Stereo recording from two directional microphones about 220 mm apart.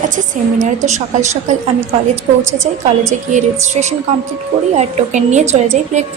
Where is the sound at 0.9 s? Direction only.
30° right (ahead or behind).